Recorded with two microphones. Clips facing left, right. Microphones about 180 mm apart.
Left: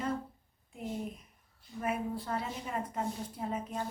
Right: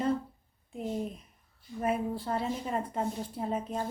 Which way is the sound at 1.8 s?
30° right (ahead or behind).